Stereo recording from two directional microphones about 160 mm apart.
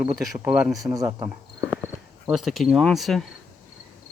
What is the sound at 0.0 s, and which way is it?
Speech, 5° right (ahead or behind).